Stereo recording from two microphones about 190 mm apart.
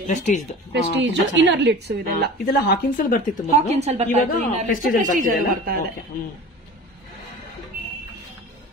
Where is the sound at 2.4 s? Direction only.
50° left (ahead or behind).